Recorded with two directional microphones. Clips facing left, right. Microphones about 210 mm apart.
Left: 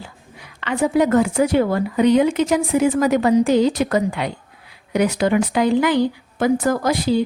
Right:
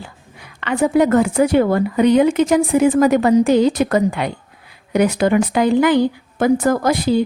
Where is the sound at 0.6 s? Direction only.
55° right (ahead or behind).